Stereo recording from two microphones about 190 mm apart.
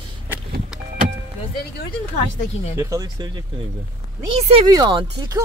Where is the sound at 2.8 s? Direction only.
15° right (ahead or behind).